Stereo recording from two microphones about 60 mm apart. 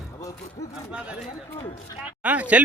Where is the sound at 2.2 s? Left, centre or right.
Right.